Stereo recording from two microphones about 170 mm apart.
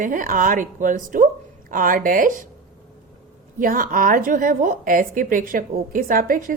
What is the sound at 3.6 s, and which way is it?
A woman's voice, 55° right (ahead or behind).